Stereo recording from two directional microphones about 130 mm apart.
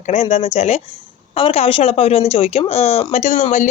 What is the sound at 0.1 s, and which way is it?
Speech, 55° left (ahead or behind).